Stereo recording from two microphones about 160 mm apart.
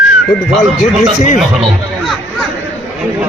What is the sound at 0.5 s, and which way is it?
Speech, centre (ahead or behind).